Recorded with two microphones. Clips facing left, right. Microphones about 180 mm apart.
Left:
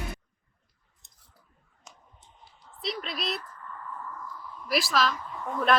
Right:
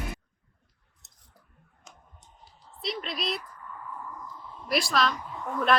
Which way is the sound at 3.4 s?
10° right (ahead or behind).